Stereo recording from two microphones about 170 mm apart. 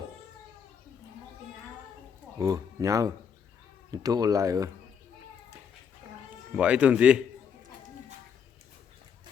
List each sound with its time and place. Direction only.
2.4 s speech: 20° right (ahead or behind)
6.6 s speech: 5° right (ahead or behind)